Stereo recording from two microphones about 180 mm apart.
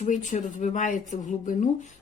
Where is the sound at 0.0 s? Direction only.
45° left (ahead or behind).